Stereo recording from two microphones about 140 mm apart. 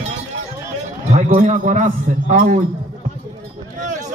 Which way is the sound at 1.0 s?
55° right (ahead or behind).